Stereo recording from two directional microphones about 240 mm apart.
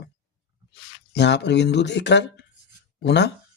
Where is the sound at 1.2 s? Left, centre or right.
Left.